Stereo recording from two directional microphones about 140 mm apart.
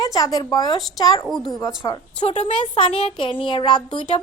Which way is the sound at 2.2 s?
50° left (ahead or behind).